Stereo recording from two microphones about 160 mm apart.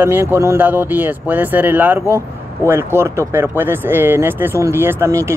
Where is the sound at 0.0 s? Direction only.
15° right (ahead or behind).